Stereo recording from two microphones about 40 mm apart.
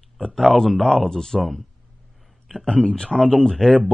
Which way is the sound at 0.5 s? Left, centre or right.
Centre.